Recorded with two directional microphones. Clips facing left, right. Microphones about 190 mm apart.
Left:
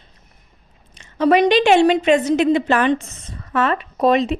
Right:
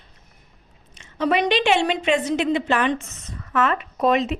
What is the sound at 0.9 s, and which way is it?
Speech, 40° left (ahead or behind).